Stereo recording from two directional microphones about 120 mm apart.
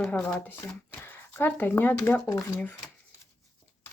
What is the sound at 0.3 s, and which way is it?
Speech, 10° left (ahead or behind).